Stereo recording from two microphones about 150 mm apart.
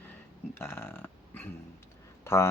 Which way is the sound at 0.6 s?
15° left (ahead or behind).